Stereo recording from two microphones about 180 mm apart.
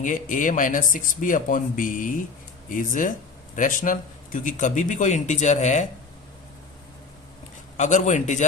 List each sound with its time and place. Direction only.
0.0 s speech: 45° left (ahead or behind)
7.8 s speech: 45° left (ahead or behind)